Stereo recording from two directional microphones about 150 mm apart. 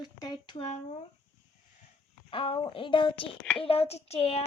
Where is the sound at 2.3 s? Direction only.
35° left (ahead or behind).